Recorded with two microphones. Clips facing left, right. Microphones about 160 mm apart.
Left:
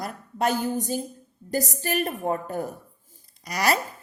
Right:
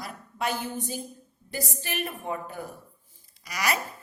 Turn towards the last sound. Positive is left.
turn(degrees=35)  # may be behind; listen again after turning